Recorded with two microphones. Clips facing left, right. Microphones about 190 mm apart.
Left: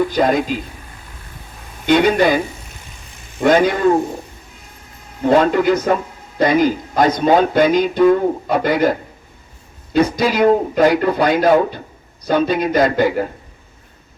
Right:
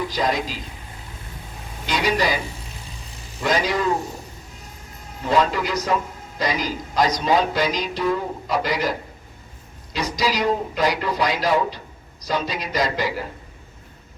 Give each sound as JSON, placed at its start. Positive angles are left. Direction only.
{"t": 0.2, "sound": "speech", "side_deg": 55}
{"t": 1.9, "sound": "speech", "side_deg": 55}
{"t": 3.4, "sound": "speech", "side_deg": 55}
{"t": 5.3, "sound": "a man's voice", "side_deg": 55}